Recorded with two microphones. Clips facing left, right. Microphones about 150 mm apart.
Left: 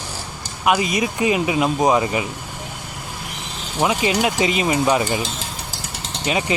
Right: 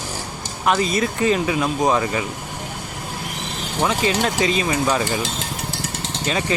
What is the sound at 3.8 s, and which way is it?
Speech, 15° left (ahead or behind).